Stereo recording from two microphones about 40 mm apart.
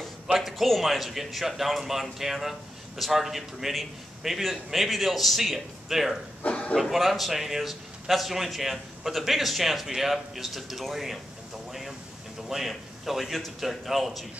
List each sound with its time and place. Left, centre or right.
0.4 s a man's voice: centre
6.4 s speech: left
6.8 s a man's voice: centre
12.4 s a man's voice: centre